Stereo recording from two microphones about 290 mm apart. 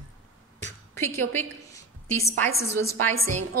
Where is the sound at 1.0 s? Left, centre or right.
Centre.